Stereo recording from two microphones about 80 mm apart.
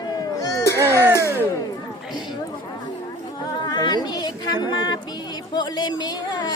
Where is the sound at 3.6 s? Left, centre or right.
Left.